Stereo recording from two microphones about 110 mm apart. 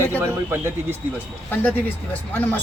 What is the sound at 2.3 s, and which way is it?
Speech, 15° left (ahead or behind).